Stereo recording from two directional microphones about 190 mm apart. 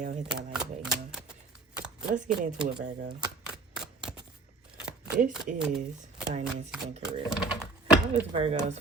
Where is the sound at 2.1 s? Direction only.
40° right (ahead or behind).